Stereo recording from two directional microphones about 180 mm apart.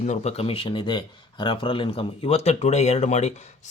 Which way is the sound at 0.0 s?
35° left (ahead or behind).